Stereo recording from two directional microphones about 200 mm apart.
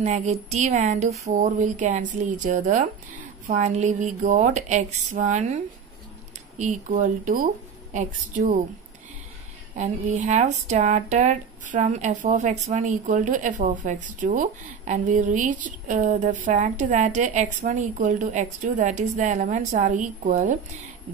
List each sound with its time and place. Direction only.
0.0 s speech: 35° right (ahead or behind)
6.6 s speech: 40° right (ahead or behind)
9.8 s speech: 40° right (ahead or behind)